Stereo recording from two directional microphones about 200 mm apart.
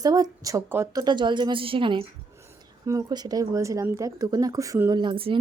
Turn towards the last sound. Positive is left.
turn(degrees=-25)  # may be behind; listen again after turning